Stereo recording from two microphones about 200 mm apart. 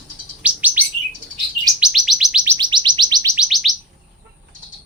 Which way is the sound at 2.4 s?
20° right (ahead or behind).